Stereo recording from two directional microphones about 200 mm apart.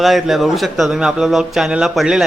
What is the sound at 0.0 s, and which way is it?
A man's voice, centre (ahead or behind).